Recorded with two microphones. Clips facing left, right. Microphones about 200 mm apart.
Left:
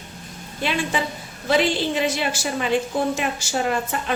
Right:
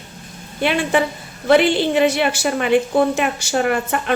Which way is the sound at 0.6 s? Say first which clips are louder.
Right 6 dB; 65° right (ahead or behind).